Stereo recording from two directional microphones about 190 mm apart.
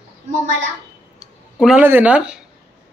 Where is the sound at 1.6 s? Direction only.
5° right (ahead or behind).